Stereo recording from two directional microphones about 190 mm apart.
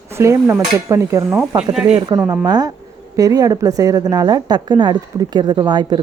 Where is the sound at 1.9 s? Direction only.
25° right (ahead or behind).